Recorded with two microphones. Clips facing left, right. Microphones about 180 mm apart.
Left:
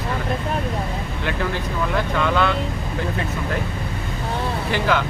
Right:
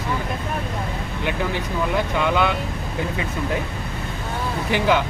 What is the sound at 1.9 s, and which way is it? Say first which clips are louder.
Speech: even; 15° right (ahead or behind).